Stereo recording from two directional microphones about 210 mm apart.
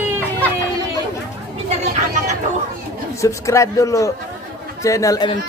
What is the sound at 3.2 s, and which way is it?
A man's voice, 15° left (ahead or behind).